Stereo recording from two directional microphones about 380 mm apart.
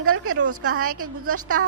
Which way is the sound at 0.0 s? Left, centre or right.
Right.